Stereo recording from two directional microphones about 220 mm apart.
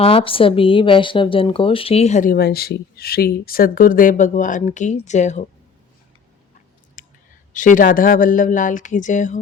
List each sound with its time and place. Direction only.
0.0 s a woman's voice: 25° left (ahead or behind)
7.0 s clicking: 35° left (ahead or behind)
7.5 s a woman's voice: 35° left (ahead or behind)